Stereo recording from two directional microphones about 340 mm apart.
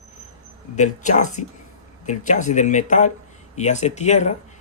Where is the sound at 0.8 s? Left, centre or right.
Left.